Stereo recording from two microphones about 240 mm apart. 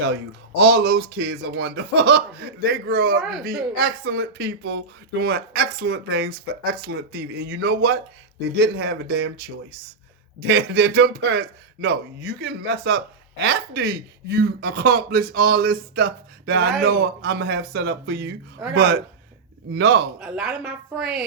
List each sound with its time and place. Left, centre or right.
0.5 s speech: right
3.2 s a woman's voice: centre
3.4 s speech: right
20.1 s a woman's voice: centre